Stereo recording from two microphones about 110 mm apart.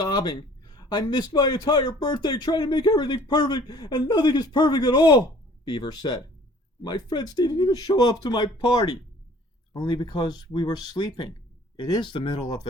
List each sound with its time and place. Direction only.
0.0 s speech: 40° left (ahead or behind)